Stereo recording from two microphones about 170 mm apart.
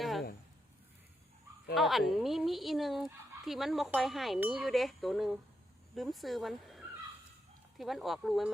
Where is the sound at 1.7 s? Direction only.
Centre (ahead or behind).